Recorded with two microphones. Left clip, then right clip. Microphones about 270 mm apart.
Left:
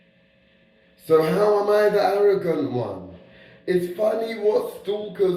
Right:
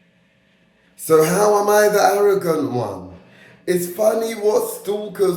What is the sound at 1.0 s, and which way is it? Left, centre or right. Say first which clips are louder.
Speech: right 4 dB; right.